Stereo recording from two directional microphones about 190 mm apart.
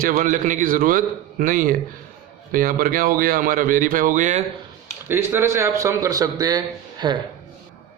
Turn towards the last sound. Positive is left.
turn(degrees=-20)  # may be behind; listen again after turning